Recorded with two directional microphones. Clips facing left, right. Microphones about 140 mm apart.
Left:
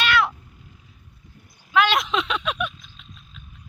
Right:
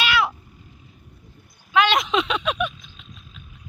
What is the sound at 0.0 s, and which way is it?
Cat, 5° right (ahead or behind).